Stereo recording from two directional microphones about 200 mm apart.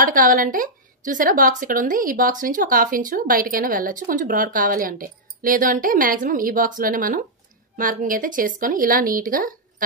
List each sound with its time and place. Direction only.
0.0 s speech: 45° right (ahead or behind)